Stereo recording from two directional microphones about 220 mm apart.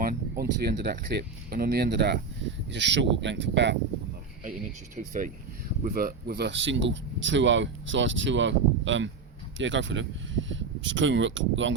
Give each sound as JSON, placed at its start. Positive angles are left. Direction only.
{"t": 0.0, "sound": "speech", "side_deg": -45}
{"t": 5.0, "sound": "speech", "side_deg": -35}